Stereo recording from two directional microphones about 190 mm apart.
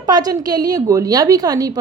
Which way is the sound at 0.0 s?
20° right (ahead or behind).